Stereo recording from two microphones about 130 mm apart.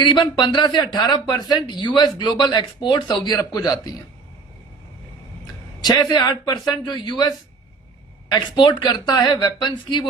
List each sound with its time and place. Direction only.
0.0 s speech: 35° left (ahead or behind)
5.8 s speech: 35° left (ahead or behind)